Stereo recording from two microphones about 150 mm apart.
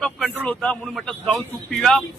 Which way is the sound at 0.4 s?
5° left (ahead or behind).